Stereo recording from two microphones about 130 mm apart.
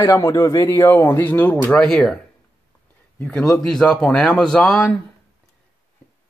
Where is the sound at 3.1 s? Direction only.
5° left (ahead or behind).